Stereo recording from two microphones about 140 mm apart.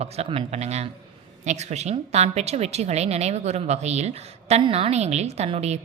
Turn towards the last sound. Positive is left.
turn(degrees=-50)  # may be behind; listen again after turning